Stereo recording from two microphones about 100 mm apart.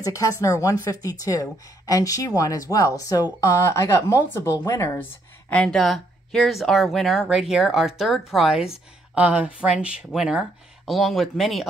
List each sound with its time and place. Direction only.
0.0 s speech: 35° left (ahead or behind)
5.5 s speech: 15° left (ahead or behind)
5.8 s speech: 5° left (ahead or behind)